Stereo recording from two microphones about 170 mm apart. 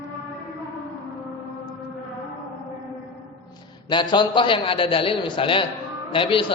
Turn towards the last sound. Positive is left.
turn(degrees=30)  # may be behind; listen again after turning